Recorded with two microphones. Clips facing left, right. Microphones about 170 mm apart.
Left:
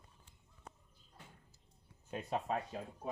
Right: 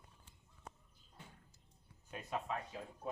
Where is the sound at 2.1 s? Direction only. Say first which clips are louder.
Left 4 dB; 25° left (ahead or behind).